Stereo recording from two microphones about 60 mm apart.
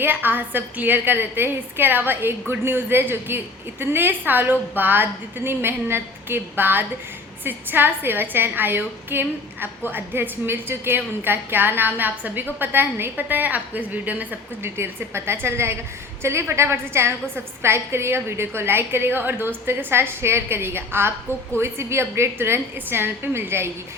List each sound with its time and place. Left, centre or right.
0.0 s a woman's voice: right
14.6 s a woman's voice: right